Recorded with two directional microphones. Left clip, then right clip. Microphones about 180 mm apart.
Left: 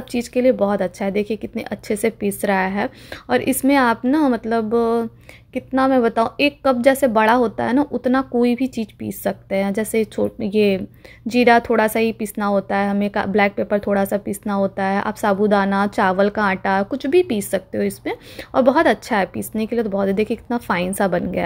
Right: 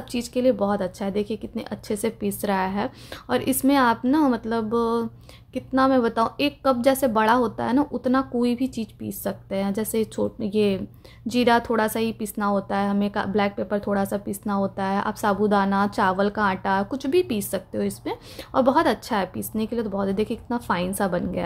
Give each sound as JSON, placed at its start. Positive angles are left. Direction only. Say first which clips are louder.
{"t": 0.1, "sound": "speech", "louder": "left 5 dB", "side_deg": 15}